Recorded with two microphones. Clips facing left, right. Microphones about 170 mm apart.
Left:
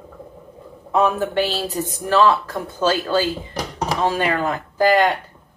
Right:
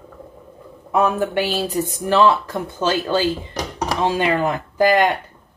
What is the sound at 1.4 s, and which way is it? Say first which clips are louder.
A woman's voice: right 1 dB; 15° right (ahead or behind).